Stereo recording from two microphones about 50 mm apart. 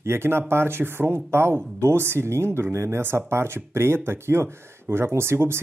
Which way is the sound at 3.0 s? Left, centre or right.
Right.